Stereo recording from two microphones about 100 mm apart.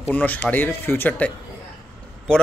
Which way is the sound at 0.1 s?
15° left (ahead or behind).